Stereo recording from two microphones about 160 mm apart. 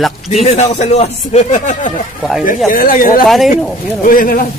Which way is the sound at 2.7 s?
60° left (ahead or behind).